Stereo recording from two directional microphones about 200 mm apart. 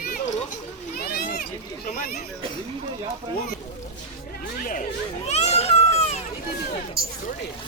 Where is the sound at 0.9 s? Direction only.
50° left (ahead or behind).